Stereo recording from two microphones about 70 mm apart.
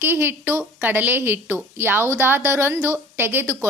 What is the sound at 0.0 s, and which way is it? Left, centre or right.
A woman's voice, right.